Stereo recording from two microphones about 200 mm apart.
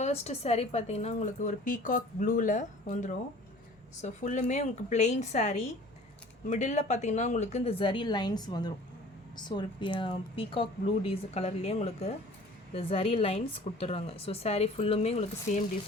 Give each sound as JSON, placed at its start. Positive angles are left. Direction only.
{"t": 0.0, "sound": "a woman's voice", "side_deg": 30}